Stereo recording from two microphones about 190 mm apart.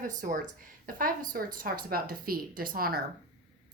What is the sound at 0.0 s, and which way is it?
Speech, 40° right (ahead or behind).